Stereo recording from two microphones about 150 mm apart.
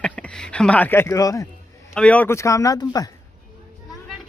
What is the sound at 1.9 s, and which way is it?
Speech, 10° left (ahead or behind).